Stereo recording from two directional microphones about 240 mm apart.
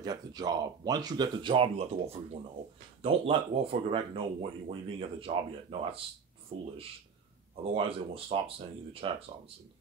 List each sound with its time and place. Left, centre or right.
0.0 s speech: centre
7.7 s speech: right